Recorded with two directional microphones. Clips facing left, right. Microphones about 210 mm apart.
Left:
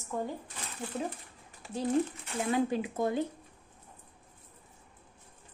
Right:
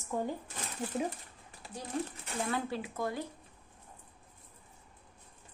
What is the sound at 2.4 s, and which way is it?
Speech, 15° left (ahead or behind).